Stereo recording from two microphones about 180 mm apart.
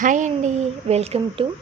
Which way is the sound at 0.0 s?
45° right (ahead or behind).